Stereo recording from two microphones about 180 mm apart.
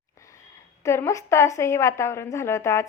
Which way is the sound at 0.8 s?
15° left (ahead or behind).